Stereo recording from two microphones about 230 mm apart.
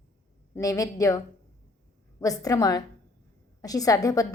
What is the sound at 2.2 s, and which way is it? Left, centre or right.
A woman's voice, centre.